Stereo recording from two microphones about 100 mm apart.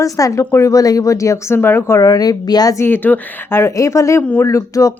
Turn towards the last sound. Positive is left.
turn(degrees=30)  # may be behind; listen again after turning